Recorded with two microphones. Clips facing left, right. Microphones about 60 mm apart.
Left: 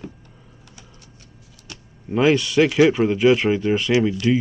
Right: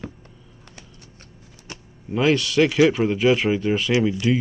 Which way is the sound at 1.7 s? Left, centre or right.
Right.